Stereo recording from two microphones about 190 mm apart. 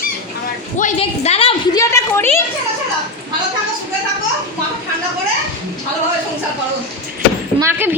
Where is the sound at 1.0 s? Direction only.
30° left (ahead or behind).